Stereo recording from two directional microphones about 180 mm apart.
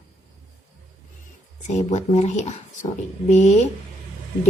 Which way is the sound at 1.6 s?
40° left (ahead or behind).